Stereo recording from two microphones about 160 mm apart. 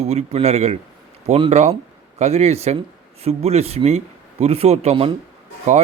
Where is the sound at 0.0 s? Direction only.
40° right (ahead or behind).